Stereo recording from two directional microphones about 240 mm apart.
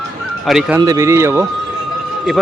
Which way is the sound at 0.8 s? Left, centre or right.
Centre.